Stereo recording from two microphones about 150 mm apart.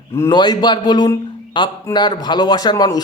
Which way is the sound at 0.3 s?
30° left (ahead or behind).